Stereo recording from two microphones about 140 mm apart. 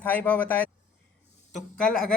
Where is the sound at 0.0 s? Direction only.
15° left (ahead or behind).